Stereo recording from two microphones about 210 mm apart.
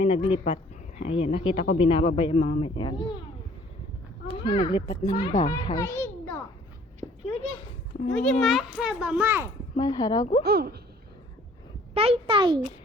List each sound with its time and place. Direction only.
0.0 s speech: 25° left (ahead or behind)
4.4 s a child's voice: 20° left (ahead or behind)
8.1 s a child's voice: 5° left (ahead or behind)
9.7 s speech: 20° left (ahead or behind)
10.4 s a woman's voice: 50° right (ahead or behind)
11.9 s a child's voice: 30° right (ahead or behind)